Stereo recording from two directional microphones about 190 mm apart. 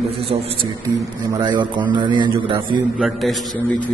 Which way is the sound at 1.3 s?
25° right (ahead or behind).